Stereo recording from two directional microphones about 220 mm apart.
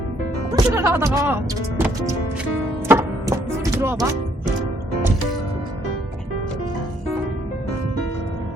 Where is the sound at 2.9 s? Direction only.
10° right (ahead or behind).